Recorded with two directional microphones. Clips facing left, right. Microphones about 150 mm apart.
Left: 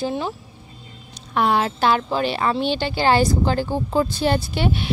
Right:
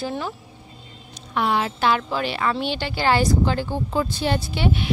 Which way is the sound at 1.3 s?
45° left (ahead or behind).